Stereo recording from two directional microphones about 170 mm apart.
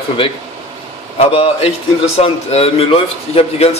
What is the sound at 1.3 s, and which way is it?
A man's voice, 35° left (ahead or behind).